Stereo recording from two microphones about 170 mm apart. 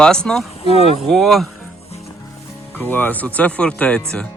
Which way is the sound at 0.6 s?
35° left (ahead or behind).